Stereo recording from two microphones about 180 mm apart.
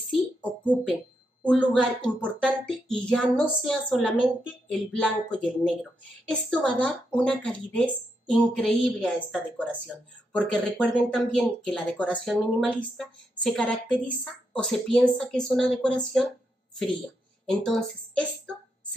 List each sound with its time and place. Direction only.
0.1 s a sound: 5° left (ahead or behind)
1.4 s speech: 5° left (ahead or behind)
17.5 s speech: 5° left (ahead or behind)